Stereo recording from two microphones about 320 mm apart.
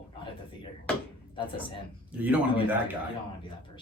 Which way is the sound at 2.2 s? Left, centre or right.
Centre.